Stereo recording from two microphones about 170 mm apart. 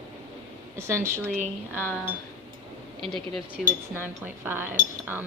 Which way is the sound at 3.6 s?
10° right (ahead or behind).